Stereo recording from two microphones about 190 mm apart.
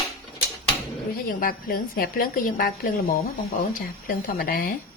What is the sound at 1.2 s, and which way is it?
A woman's voice, 50° left (ahead or behind).